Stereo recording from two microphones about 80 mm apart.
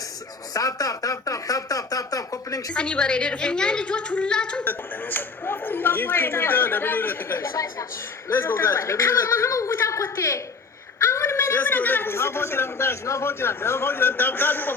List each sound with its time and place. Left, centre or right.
0.5 s a sound: left
2.7 s a woman's voice: centre
4.6 s a man's voice: left
7.5 s a woman's voice: left
8.3 s a man's voice: left